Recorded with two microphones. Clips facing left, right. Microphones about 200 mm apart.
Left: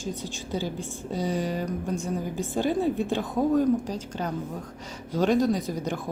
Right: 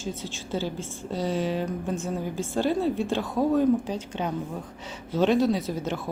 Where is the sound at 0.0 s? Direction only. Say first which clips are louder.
Left 1 dB; 15° left (ahead or behind).